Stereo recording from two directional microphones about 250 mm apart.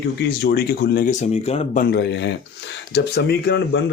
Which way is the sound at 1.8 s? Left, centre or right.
Left.